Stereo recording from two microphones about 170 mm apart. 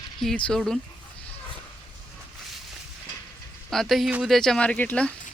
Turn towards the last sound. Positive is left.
turn(degrees=10)  # may be behind; listen again after turning